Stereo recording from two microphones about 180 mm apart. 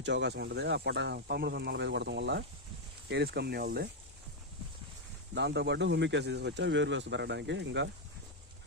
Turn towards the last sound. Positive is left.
turn(degrees=-75)  # may be behind; listen again after turning